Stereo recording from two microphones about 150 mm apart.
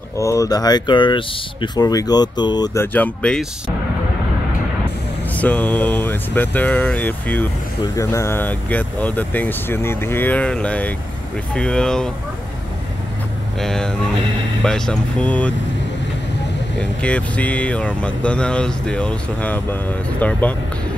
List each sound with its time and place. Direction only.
0.2 s speech: 20° left (ahead or behind)
2.8 s speech: 10° left (ahead or behind)
5.3 s speech: 10° left (ahead or behind)
13.6 s speech: 5° left (ahead or behind)
17.0 s speech: 10° left (ahead or behind)